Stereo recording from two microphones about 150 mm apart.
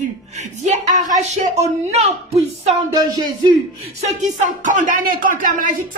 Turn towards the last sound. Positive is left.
turn(degrees=-65)  # may be behind; listen again after turning